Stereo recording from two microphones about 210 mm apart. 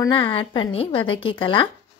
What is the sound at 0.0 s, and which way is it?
A woman's voice, 20° left (ahead or behind).